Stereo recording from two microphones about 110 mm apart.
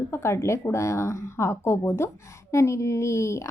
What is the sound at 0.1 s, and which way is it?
A woman's voice, 25° left (ahead or behind).